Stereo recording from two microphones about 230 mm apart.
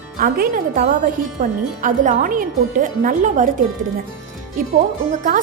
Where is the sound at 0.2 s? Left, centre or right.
Right.